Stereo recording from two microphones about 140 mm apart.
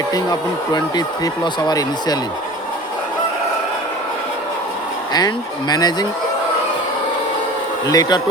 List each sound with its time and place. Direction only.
0.1 s speech: 30° left (ahead or behind)
5.1 s speech: 30° left (ahead or behind)
7.9 s speech: 25° left (ahead or behind)